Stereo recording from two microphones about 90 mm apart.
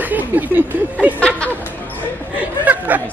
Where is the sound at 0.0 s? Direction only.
20° right (ahead or behind).